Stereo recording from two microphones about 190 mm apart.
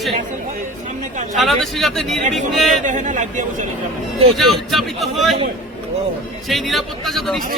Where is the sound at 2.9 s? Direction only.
40° right (ahead or behind).